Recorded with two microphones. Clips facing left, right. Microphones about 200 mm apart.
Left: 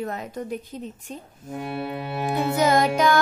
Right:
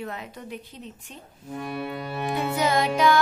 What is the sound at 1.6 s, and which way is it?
Music, 25° left (ahead or behind).